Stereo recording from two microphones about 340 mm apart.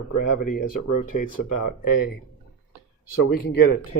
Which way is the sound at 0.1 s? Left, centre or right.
Left.